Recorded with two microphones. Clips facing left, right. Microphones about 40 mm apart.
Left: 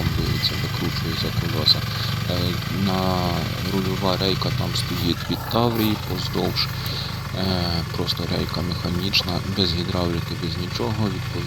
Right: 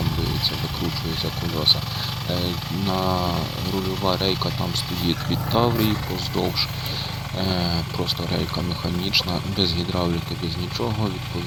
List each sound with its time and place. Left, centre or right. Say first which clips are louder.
0.0 s vehicle: even; centre
2.3 s speech: right 1 dB; centre
6.3 s speech: even; centre
7.3 s speech: even; centre